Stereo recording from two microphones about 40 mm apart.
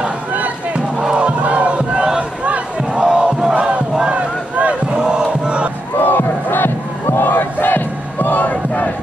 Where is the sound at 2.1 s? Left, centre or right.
Right.